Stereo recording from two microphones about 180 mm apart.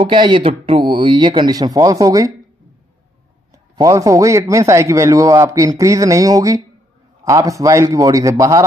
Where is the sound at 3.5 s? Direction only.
20° right (ahead or behind).